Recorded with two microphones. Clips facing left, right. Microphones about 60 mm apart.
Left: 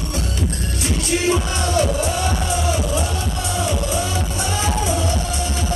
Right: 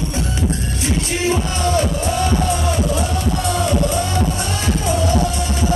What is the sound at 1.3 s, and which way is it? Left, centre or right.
Music, right.